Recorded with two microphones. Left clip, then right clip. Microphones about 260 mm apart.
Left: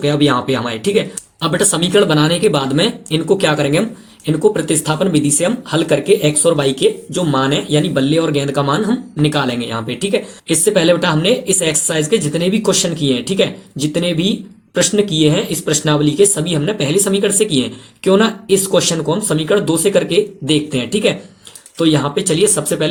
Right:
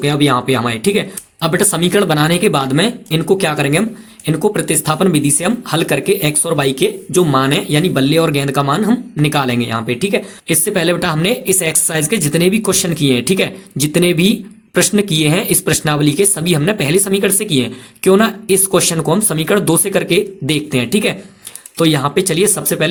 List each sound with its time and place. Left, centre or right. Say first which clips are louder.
0.0 s speech: even; right
12.4 s speech: right 3 dB; right
12.6 s speech: even; right
14.9 s speech: left 1 dB; right
15.6 s speech: even; right